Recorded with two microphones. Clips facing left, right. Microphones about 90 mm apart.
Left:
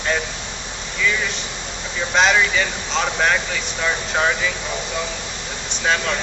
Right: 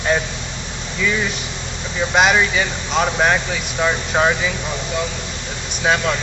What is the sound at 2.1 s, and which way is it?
Speech, 10° right (ahead or behind).